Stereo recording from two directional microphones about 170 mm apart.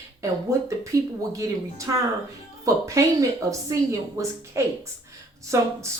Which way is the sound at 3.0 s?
20° right (ahead or behind).